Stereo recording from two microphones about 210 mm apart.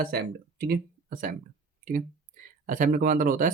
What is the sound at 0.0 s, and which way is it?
Speech, 45° right (ahead or behind).